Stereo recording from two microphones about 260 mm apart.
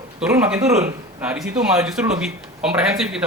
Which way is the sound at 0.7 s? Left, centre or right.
Right.